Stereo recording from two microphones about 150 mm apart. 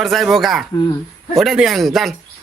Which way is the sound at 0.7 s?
25° left (ahead or behind).